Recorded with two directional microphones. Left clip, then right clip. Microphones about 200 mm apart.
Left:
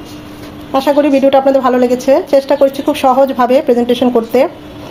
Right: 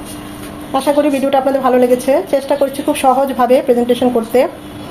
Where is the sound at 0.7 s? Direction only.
30° left (ahead or behind).